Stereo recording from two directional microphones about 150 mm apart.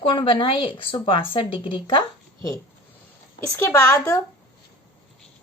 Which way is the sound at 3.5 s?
20° left (ahead or behind).